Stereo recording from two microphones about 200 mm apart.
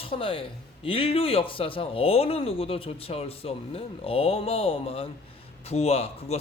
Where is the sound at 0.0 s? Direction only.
25° left (ahead or behind).